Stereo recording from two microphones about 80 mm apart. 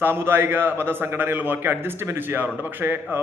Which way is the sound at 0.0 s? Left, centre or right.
Right.